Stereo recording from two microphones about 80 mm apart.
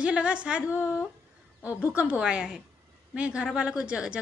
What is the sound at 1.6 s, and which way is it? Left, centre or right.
A woman's voice, centre.